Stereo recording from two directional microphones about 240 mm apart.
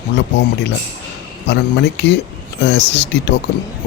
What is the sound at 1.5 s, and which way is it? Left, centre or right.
Speech, left.